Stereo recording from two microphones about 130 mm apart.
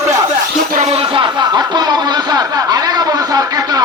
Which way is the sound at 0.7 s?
60° right (ahead or behind).